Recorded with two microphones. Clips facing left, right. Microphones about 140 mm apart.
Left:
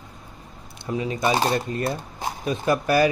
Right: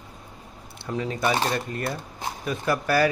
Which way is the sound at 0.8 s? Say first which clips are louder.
Left 2 dB; 10° left (ahead or behind).